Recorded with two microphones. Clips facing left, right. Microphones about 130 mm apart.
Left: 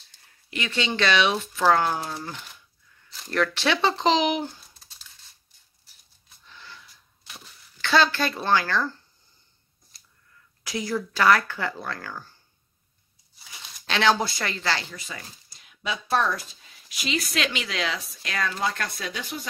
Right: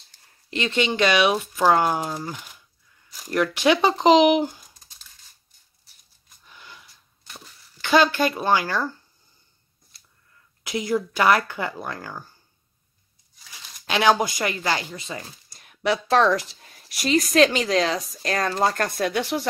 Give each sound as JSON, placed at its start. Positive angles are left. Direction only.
{"t": 0.5, "sound": "speech", "side_deg": -30}
{"t": 0.7, "sound": "speech", "side_deg": -15}
{"t": 6.4, "sound": "a sound", "side_deg": -15}
{"t": 7.7, "sound": "speech", "side_deg": -15}
{"t": 10.6, "sound": "speech", "side_deg": -20}
{"t": 13.8, "sound": "speech", "side_deg": -15}
{"t": 15.0, "sound": "speech", "side_deg": -30}
{"t": 15.5, "sound": "a sound", "side_deg": -50}
{"t": 15.8, "sound": "speech", "side_deg": -85}
{"t": 16.6, "sound": "speech", "side_deg": -45}